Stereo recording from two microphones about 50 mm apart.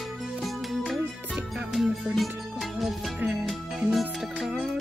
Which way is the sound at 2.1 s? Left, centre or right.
Centre.